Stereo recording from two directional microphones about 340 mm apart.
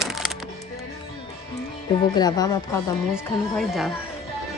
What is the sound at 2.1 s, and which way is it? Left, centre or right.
Speech, centre.